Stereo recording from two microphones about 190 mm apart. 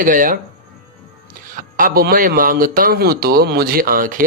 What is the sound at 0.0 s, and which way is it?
Speech, 45° right (ahead or behind).